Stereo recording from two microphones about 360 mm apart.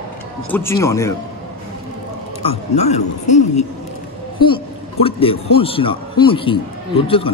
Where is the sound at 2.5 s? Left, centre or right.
Centre.